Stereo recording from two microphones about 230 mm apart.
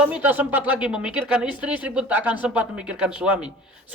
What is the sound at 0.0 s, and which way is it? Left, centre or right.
A woman's voice, centre.